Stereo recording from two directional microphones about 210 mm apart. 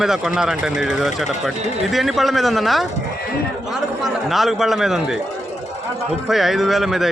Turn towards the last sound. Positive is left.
turn(degrees=0)  # may be behind; listen again after turning